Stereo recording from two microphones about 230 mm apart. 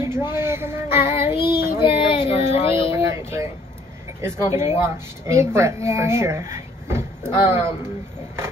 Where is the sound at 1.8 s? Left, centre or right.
Left.